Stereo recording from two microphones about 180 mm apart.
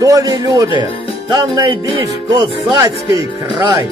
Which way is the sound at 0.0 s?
20° right (ahead or behind).